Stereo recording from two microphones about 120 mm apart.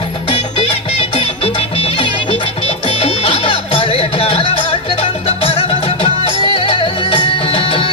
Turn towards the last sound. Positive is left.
turn(degrees=45)  # may be behind; listen again after turning